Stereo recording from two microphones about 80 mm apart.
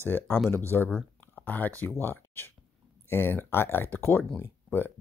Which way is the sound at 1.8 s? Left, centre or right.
Left.